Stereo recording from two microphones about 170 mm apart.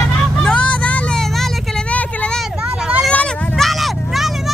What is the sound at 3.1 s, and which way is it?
Vehicle, 5° left (ahead or behind).